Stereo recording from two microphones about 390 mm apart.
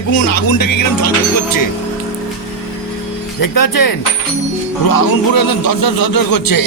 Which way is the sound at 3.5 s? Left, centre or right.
Left.